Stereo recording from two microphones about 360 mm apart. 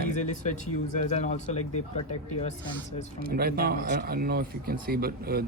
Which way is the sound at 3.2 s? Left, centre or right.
Right.